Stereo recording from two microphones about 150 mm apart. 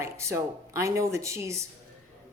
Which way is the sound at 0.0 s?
20° right (ahead or behind).